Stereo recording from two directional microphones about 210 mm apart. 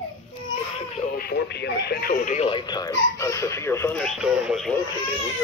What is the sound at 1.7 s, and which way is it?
Speech, 50° left (ahead or behind).